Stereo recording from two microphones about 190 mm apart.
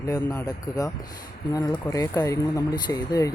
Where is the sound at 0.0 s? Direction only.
20° left (ahead or behind).